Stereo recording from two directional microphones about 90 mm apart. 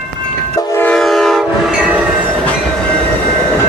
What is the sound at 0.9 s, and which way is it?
Train, 5° left (ahead or behind).